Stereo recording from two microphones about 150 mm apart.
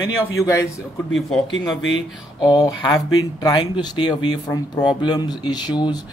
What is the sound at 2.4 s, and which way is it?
Speech, 25° left (ahead or behind).